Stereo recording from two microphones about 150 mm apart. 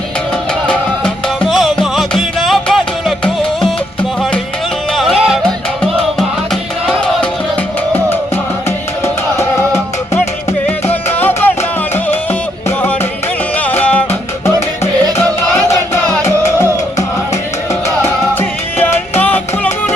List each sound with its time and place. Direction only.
0.7 s music: centre (ahead or behind)
11.2 s music: 10° left (ahead or behind)
13.7 s music: 10° left (ahead or behind)
15.7 s music: 20° left (ahead or behind)
18.0 s music: 15° left (ahead or behind)